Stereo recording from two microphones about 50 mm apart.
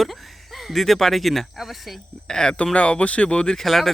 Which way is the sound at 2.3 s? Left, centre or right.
Centre.